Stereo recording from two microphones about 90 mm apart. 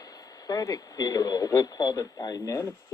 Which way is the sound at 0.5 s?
45° left (ahead or behind).